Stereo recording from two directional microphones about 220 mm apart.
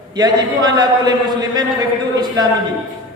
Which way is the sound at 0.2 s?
20° right (ahead or behind).